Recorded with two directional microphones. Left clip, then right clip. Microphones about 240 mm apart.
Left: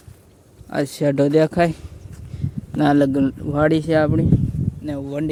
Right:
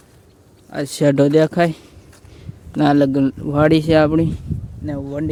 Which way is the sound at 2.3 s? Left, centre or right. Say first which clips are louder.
Left 13 dB; centre.